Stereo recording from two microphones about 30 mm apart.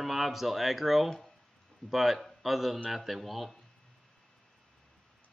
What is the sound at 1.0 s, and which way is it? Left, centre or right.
Speech, centre.